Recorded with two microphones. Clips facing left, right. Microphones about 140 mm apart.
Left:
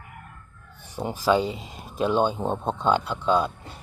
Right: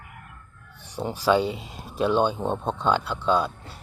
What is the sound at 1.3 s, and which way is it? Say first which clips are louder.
Speech: even; 40° left (ahead or behind).